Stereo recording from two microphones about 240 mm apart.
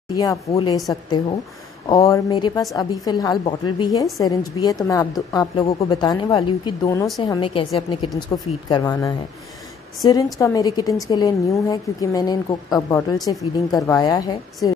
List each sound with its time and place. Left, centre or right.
0.1 s a woman's voice: centre
1.9 s a woman's voice: centre